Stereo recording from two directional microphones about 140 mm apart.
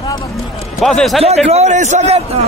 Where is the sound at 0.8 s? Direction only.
5° left (ahead or behind).